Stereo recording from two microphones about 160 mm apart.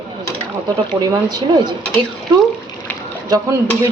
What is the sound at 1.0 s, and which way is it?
Speech, 25° right (ahead or behind).